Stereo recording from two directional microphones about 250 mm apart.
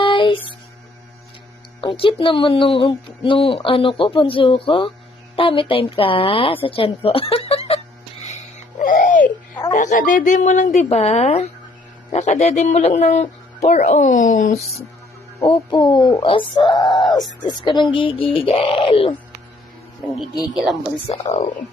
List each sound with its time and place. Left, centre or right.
0.0 s music: centre
1.8 s speech: left
8.3 s a sound: left
9.7 s speech: left
15.4 s speech: centre
21.1 s speech: left